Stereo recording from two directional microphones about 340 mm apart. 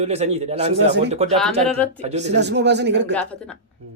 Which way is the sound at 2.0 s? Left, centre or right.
Centre.